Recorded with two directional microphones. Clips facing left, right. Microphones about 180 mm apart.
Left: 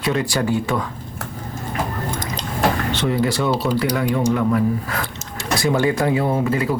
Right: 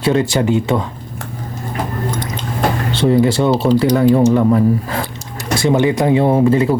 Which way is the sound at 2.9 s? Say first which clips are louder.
Right 7 dB; 30° right (ahead or behind).